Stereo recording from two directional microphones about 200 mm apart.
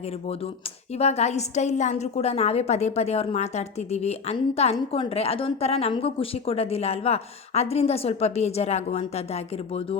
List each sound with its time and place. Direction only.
0.9 s a woman's voice: 30° left (ahead or behind)